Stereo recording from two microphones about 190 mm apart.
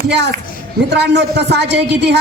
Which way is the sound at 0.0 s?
60° right (ahead or behind).